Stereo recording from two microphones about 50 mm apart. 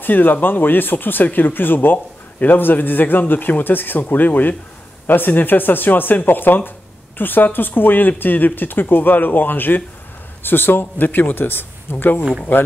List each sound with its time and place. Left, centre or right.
0.0 s speech: left